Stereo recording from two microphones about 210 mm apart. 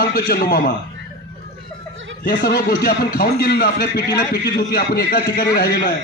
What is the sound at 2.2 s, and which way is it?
A man's voice, 50° left (ahead or behind).